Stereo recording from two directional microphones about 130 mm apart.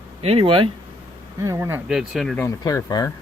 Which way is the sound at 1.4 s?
25° right (ahead or behind).